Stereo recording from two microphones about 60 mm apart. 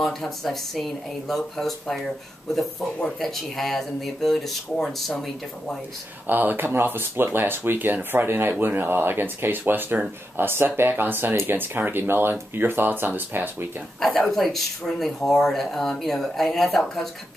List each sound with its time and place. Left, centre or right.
0.0 s speech: centre
3.2 s speech: centre
6.2 s speech: right
13.9 s speech: centre